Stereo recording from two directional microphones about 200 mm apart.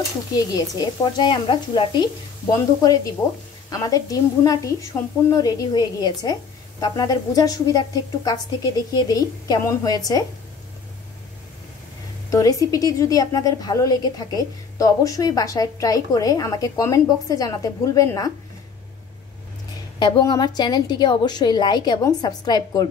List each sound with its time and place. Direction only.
0.3 s a woman's voice: 20° left (ahead or behind)
12.3 s a woman's voice: 15° left (ahead or behind)
20.0 s a woman's voice: 20° left (ahead or behind)